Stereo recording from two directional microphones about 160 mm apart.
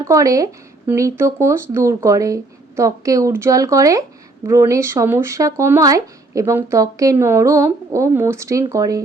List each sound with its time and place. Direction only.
0.0 s speech: 20° right (ahead or behind)